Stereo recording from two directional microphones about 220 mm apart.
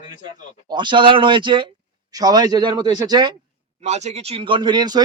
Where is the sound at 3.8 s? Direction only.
30° right (ahead or behind).